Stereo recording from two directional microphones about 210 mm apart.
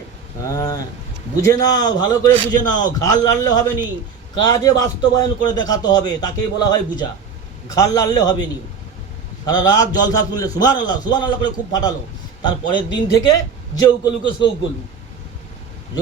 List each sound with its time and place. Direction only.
0.5 s a man's voice: 20° left (ahead or behind)
9.5 s a man's voice: 20° left (ahead or behind)